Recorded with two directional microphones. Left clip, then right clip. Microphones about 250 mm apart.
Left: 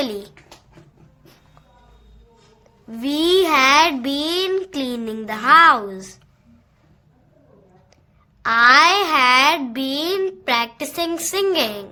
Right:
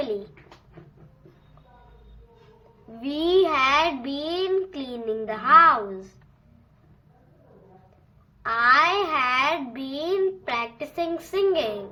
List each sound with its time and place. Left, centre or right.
3.0 s a child's voice: left
8.4 s a child's voice: left